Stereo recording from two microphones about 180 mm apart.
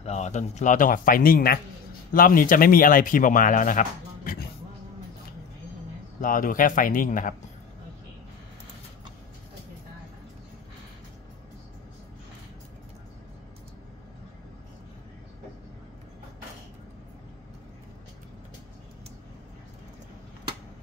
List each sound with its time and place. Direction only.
0.0 s speech: 40° left (ahead or behind)
6.2 s speech: 50° left (ahead or behind)